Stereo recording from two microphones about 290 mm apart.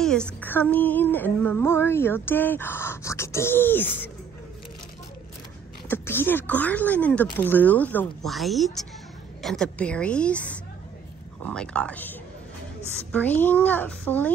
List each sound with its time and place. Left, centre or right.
0.0 s speech: centre
5.9 s speech: centre